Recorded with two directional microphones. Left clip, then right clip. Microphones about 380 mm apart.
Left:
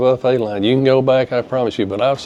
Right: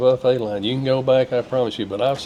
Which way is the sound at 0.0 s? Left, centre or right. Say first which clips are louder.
Left 2 dB; left.